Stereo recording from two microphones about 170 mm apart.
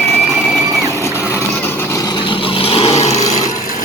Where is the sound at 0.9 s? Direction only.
15° left (ahead or behind); by 3.5 s 40° left (ahead or behind).